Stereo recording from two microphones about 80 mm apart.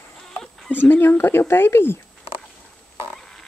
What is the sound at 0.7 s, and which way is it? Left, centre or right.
Speech, left.